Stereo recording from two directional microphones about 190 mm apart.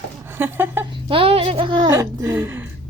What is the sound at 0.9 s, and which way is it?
A child's voice, 25° right (ahead or behind).